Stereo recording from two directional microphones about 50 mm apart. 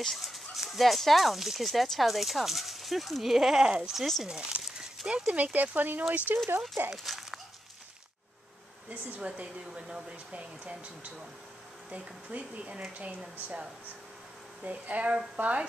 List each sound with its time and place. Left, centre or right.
0.0 s speech: centre
3.6 s speech: centre
3.9 s speech: centre
4.3 s speech: centre
4.6 s dog: centre
5.2 s speech: right
6.3 s speech: right
6.9 s a sound: centre
8.8 s speech: right
9.7 s speech: centre
11.9 s speech: right
14.6 s speech: right